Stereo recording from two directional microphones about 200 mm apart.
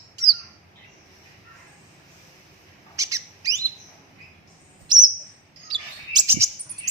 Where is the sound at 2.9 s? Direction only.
15° right (ahead or behind).